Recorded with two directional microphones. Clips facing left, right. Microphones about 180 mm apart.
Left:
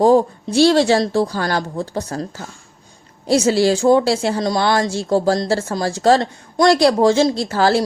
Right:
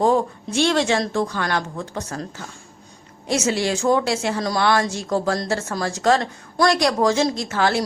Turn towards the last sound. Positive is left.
turn(degrees=35)  # may be behind; listen again after turning